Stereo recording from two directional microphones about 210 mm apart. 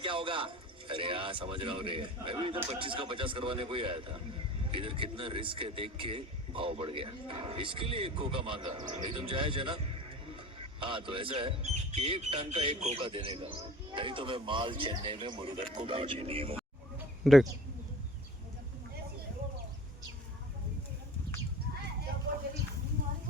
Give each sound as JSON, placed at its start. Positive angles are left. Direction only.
{"t": 0.0, "sound": "a man's voice", "side_deg": -25}
{"t": 17.2, "sound": "speech", "side_deg": 0}